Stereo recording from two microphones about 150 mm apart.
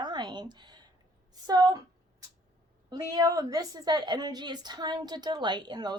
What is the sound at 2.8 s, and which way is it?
A woman's voice, 25° right (ahead or behind).